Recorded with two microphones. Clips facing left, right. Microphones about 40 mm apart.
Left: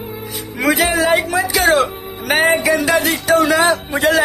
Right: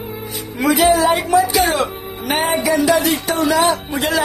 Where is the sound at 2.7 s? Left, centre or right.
Left.